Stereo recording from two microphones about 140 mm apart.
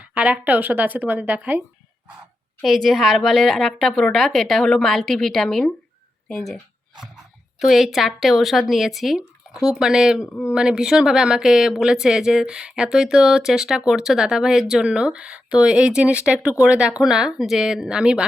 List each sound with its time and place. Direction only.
0.1 s speech: 10° right (ahead or behind)
2.6 s speech: centre (ahead or behind)
10.2 s speech: 20° left (ahead or behind)
10.5 s speech: 5° right (ahead or behind)